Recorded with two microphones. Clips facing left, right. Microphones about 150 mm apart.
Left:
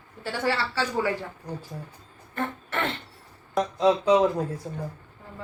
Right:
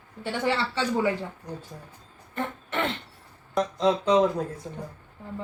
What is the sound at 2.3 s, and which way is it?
Beatboxing, 15° right (ahead or behind).